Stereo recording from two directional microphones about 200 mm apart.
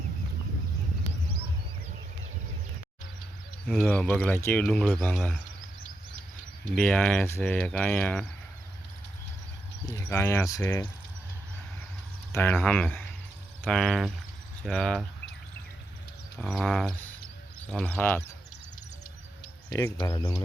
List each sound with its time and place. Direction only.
3.7 s speech: 5° left (ahead or behind)
6.7 s speech: 5° left (ahead or behind)
9.8 s speech: 15° left (ahead or behind)
12.3 s speech: 10° left (ahead or behind)
16.4 s speech: centre (ahead or behind)
19.7 s speech: 15° left (ahead or behind)